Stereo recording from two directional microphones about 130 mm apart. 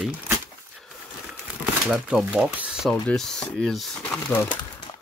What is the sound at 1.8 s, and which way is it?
Speech, centre (ahead or behind).